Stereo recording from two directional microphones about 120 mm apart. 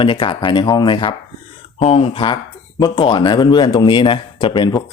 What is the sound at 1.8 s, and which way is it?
Speech, 55° left (ahead or behind).